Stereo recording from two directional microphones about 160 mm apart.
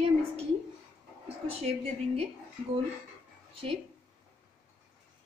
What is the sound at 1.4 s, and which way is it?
Speech, 40° right (ahead or behind).